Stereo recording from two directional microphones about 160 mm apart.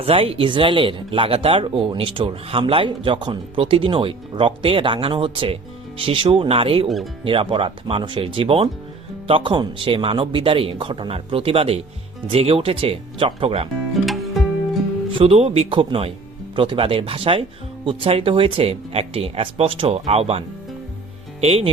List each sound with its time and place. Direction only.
0.0 s speech: 35° right (ahead or behind)
6.8 s speech: centre (ahead or behind)
7.3 s speech: 35° right (ahead or behind)
13.9 s music: centre (ahead or behind)
15.2 s speech: 40° right (ahead or behind)
21.4 s speech: 35° right (ahead or behind)